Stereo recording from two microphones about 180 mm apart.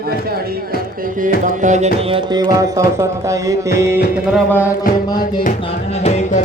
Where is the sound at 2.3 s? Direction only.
20° right (ahead or behind).